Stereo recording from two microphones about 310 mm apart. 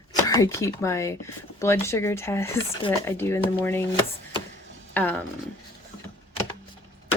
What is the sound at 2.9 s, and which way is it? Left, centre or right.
Speech, centre.